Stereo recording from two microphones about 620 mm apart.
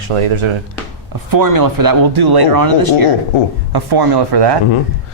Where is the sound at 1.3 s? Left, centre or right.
Right.